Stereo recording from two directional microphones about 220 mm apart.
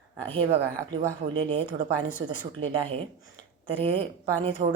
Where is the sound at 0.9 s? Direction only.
20° right (ahead or behind).